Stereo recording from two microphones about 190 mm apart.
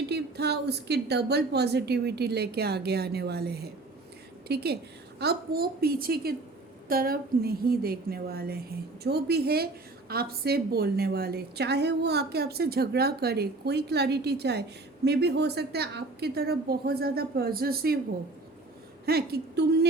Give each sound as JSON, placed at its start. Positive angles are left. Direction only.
{"t": 0.1, "sound": "a woman's voice", "side_deg": -60}
{"t": 19.0, "sound": "a woman's voice", "side_deg": -55}